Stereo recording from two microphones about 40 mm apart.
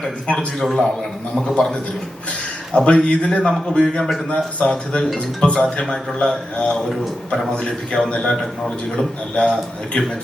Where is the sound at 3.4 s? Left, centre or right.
Centre.